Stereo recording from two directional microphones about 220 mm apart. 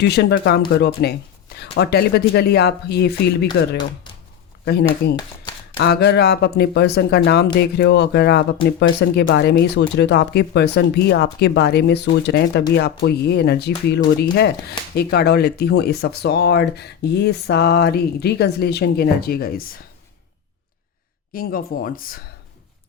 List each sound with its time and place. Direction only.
0.0 s speech: 50° left (ahead or behind)
21.3 s speech: 40° left (ahead or behind)